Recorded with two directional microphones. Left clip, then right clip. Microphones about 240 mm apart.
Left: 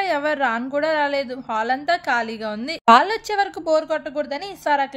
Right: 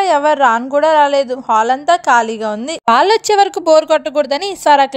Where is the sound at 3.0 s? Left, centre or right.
Right.